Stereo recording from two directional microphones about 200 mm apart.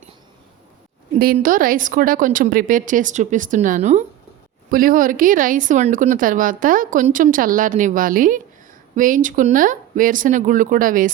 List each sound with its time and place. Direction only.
1.2 s speech: 45° right (ahead or behind)